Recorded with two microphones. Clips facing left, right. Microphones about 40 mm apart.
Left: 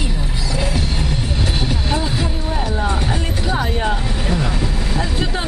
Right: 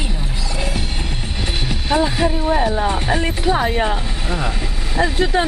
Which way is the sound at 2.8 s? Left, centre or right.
Right.